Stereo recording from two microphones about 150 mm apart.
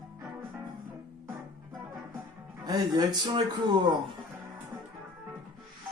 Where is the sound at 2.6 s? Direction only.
25° right (ahead or behind).